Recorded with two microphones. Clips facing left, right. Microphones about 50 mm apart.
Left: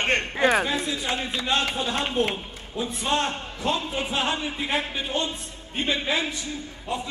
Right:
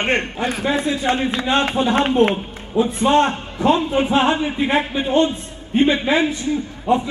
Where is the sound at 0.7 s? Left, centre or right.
Right.